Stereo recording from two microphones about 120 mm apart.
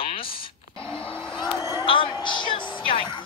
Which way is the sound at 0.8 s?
10° left (ahead or behind).